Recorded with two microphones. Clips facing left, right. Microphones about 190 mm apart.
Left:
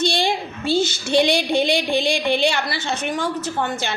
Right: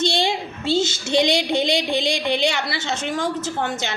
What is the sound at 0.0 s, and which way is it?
A woman's voice, 20° right (ahead or behind).